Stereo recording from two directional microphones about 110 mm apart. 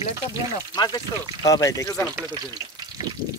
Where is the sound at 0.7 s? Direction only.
35° left (ahead or behind).